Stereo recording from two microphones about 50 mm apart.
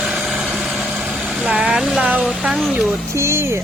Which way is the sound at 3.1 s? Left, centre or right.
Right.